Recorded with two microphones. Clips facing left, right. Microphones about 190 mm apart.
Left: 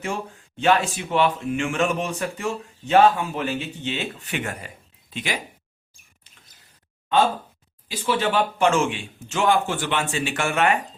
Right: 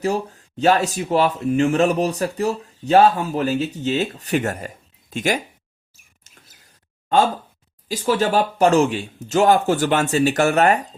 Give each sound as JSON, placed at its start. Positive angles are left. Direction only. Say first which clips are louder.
{"t": 0.0, "sound": "speech", "louder": "right 7 dB", "side_deg": -40}
{"t": 7.9, "sound": "speech", "louder": "right 4 dB", "side_deg": -45}